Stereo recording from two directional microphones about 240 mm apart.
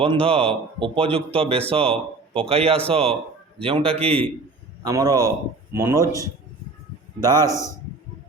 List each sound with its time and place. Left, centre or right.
0.0 s a man's voice: right
7.2 s a man's voice: centre
7.5 s a man's voice: centre